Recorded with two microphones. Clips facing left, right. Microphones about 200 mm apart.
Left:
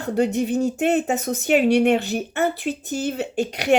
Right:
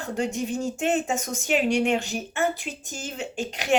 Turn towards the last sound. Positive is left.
turn(degrees=65)  # may be behind; listen again after turning